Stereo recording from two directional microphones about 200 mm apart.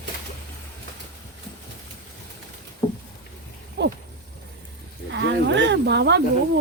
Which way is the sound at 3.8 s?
60° right (ahead or behind).